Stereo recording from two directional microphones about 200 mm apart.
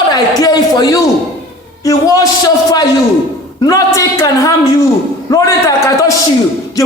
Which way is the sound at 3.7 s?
15° left (ahead or behind).